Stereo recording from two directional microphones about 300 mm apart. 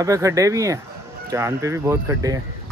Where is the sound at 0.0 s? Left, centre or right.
Centre.